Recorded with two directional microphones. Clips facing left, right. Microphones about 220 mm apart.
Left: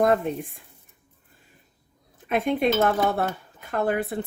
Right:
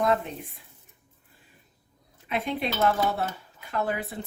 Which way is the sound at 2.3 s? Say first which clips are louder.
Left 7 dB; 50° left (ahead or behind).